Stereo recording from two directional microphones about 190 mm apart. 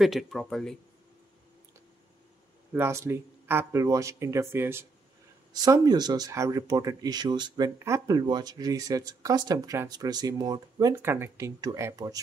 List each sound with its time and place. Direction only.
0.0 s speech: centre (ahead or behind)
2.7 s speech: 15° right (ahead or behind)